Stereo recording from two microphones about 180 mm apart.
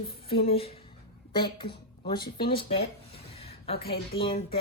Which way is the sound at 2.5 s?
30° left (ahead or behind).